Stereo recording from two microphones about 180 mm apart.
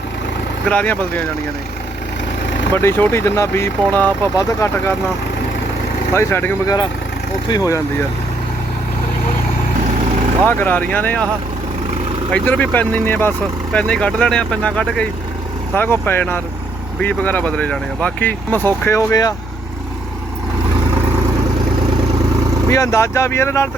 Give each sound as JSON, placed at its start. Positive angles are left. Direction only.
{"t": 0.7, "sound": "speech", "side_deg": 10}
{"t": 2.7, "sound": "speech", "side_deg": 15}
{"t": 6.1, "sound": "speech", "side_deg": 15}
{"t": 10.4, "sound": "speech", "side_deg": 10}
{"t": 12.3, "sound": "speech", "side_deg": 10}
{"t": 22.7, "sound": "speech", "side_deg": 15}